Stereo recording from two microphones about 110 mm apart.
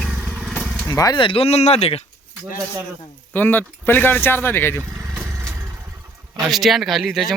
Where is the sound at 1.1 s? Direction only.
50° left (ahead or behind); by 2.0 s 70° left (ahead or behind).